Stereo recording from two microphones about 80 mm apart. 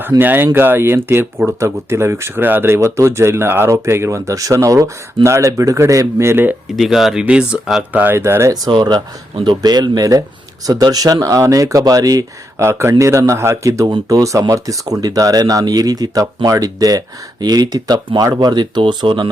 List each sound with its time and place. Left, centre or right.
0.2 s speech: right
6.7 s speech: centre
8.0 s speech: right
8.7 s speech: right
9.6 s speech: right